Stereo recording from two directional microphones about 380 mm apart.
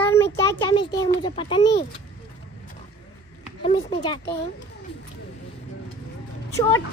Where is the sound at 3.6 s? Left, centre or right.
Centre.